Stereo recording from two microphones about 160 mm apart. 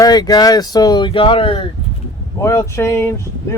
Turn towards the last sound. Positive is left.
turn(degrees=15)  # may be behind; listen again after turning